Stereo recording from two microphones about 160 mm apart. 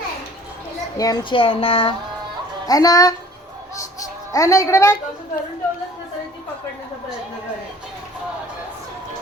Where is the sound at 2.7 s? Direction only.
25° left (ahead or behind).